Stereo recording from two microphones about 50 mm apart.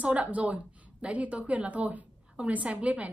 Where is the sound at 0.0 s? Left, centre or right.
Right.